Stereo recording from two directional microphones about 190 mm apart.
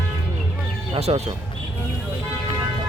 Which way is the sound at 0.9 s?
30° right (ahead or behind).